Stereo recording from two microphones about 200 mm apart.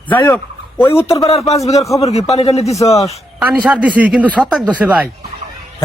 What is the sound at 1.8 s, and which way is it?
Speech, 15° left (ahead or behind).